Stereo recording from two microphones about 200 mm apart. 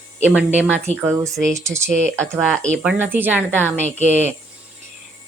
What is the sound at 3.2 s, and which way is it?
Speech, 10° right (ahead or behind).